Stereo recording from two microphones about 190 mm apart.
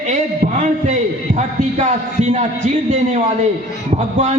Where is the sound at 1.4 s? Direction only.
40° right (ahead or behind).